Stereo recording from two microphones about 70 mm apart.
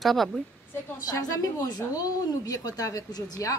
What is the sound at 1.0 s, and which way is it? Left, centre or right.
A woman's voice, left.